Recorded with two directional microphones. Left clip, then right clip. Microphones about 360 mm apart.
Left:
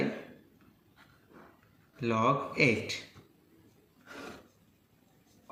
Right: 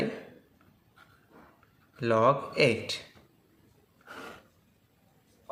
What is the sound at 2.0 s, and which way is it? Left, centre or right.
Speech, right.